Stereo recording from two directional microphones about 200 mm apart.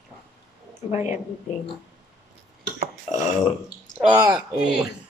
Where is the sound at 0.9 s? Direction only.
35° left (ahead or behind).